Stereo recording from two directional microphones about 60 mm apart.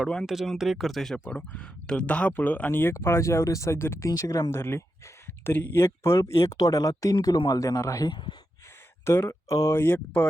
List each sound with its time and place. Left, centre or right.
0.6 s speech: centre
1.1 s speech: left
2.9 s speech: left
3.8 s speech: left
4.1 s speech: left
4.5 s speech: left
6.6 s speech: left
9.0 s speech: left
9.5 s speech: left